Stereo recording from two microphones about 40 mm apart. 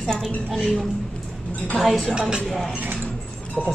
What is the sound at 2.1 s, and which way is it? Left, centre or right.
Speech, right.